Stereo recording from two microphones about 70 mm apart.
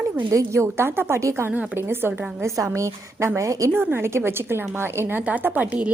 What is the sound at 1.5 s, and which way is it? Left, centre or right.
Speech, right.